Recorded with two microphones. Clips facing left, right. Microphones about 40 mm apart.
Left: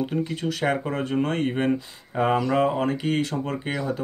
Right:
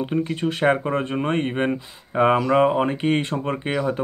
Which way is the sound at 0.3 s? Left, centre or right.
Right.